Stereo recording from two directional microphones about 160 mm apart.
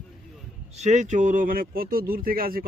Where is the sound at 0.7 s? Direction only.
45° right (ahead or behind); by 2.6 s 65° right (ahead or behind).